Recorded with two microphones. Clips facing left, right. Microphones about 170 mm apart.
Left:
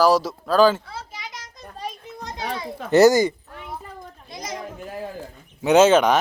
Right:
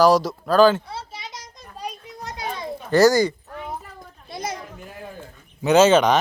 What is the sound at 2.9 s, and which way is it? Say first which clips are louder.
Speech: left 1 dB; 20° left (ahead or behind).